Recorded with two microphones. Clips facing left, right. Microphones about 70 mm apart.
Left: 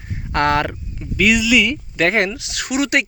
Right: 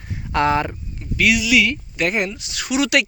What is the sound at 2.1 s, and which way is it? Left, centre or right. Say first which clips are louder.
Speech: left 4 dB; left.